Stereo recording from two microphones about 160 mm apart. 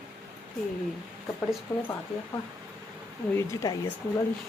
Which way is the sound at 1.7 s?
15° left (ahead or behind).